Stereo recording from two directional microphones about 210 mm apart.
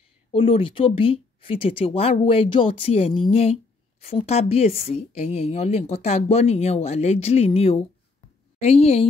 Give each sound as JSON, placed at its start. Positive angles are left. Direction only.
{"t": 0.3, "sound": "a woman's voice", "side_deg": 25}